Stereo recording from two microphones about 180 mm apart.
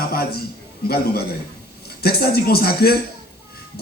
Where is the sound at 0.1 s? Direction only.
60° left (ahead or behind).